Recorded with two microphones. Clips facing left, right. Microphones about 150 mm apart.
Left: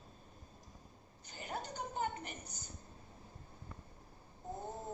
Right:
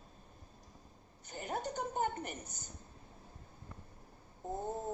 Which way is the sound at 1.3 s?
50° right (ahead or behind).